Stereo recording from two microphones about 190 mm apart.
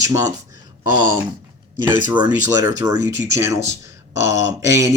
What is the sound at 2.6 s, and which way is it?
Speech, 15° right (ahead or behind).